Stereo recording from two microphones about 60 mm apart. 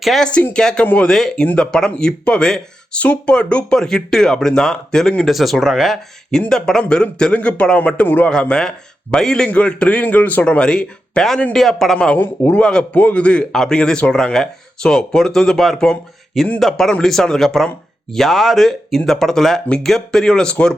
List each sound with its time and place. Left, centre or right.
0.0 s speech: centre
0.5 s speech: centre
1.1 s speech: centre
6.5 s speech: centre
8.0 s speech: left
8.3 s speech: centre; by 10.4 s left
10.4 s speech: centre
12.1 s speech: left
12.5 s speech: centre
12.9 s speech: left